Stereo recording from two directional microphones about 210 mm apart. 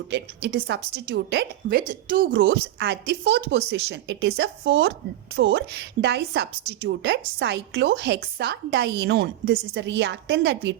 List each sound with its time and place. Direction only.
0.1 s a woman's voice: 50° right (ahead or behind)
1.9 s a woman's voice: 40° right (ahead or behind)
2.4 s a woman's voice: 55° right (ahead or behind)